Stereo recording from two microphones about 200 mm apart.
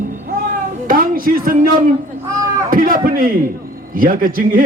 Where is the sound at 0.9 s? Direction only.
45° right (ahead or behind).